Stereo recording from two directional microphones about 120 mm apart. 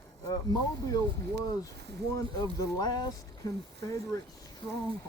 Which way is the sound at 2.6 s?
35° left (ahead or behind).